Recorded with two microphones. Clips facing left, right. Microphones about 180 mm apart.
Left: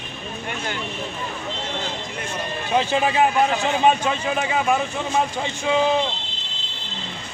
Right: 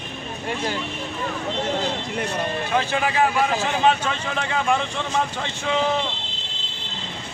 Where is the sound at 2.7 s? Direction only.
20° left (ahead or behind).